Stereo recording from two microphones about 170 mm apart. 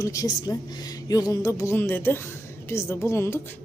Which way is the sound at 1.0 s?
20° left (ahead or behind).